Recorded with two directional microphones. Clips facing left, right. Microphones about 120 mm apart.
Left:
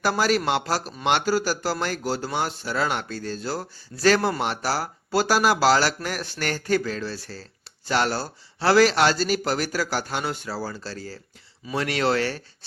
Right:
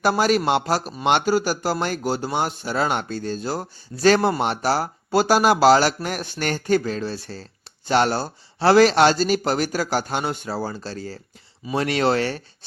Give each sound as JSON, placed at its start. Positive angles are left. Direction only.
{"t": 0.0, "sound": "speech", "side_deg": -20}